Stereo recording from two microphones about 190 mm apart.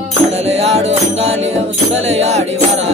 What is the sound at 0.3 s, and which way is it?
Music, 35° right (ahead or behind).